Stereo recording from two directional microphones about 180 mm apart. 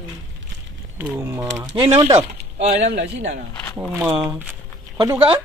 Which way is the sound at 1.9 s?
35° right (ahead or behind).